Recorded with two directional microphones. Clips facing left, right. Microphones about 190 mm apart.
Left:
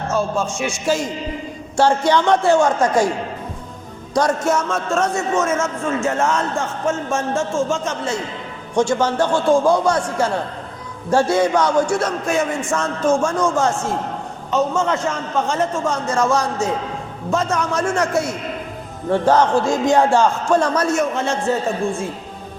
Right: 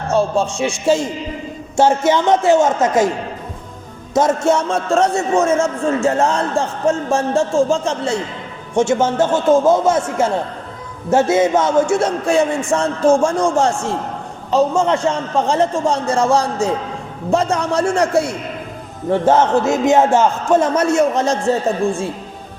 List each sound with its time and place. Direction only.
0.1 s a man's voice: 30° right (ahead or behind)
4.1 s a man's voice: 25° right (ahead or behind)
11.1 s a man's voice: 20° right (ahead or behind)